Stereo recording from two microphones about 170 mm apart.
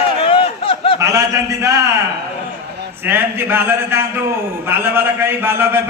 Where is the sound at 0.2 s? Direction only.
35° left (ahead or behind).